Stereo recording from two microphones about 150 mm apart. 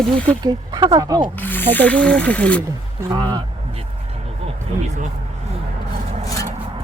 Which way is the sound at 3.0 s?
25° right (ahead or behind).